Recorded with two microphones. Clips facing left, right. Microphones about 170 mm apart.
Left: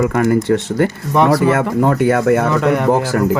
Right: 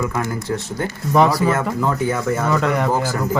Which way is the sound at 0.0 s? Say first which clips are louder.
Left 9 dB; 70° left (ahead or behind).